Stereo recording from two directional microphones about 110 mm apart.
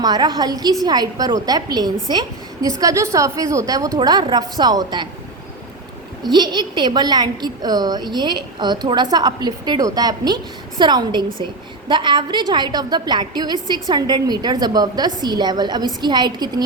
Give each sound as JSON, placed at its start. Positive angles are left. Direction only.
{"t": 0.0, "sound": "a woman's voice", "side_deg": -40}
{"t": 6.2, "sound": "a woman's voice", "side_deg": -40}